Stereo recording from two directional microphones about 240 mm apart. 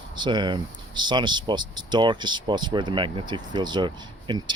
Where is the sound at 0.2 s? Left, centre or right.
Centre.